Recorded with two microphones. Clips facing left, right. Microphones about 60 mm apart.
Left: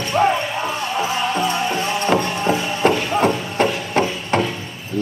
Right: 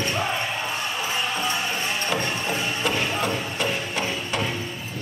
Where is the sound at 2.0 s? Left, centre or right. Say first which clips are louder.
Left 11 dB; left.